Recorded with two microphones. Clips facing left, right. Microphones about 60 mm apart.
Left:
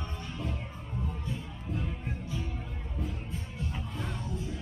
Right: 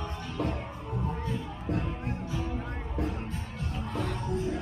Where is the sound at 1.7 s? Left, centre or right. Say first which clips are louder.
Right 5 dB; right.